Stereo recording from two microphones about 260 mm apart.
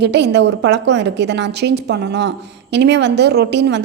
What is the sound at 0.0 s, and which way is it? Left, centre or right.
A woman's voice, right.